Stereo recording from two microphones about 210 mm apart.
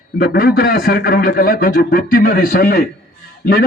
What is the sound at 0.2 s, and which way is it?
A man's voice, 45° left (ahead or behind).